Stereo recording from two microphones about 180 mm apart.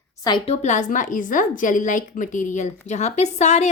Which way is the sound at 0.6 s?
40° left (ahead or behind).